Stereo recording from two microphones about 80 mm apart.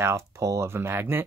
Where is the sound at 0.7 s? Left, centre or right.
Right.